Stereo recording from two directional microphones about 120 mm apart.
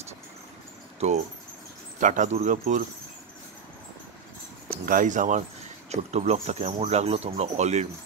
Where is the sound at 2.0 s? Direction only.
90° right.